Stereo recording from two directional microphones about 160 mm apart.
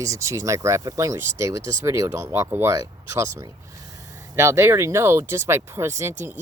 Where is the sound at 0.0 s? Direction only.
20° right (ahead or behind).